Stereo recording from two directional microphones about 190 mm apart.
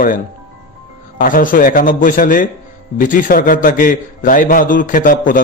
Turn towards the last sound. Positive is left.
turn(degrees=45)  # may be behind; listen again after turning